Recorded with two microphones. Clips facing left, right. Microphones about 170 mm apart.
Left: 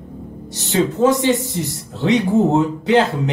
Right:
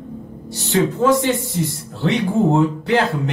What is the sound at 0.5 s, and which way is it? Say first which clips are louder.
Speech: even; 20° left (ahead or behind).